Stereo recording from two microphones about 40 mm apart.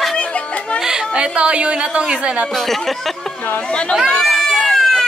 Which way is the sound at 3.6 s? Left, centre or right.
Left.